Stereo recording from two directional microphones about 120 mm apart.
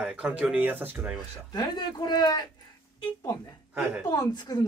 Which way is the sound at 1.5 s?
35° left (ahead or behind).